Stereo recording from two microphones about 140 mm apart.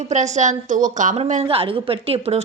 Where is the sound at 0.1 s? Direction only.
55° right (ahead or behind).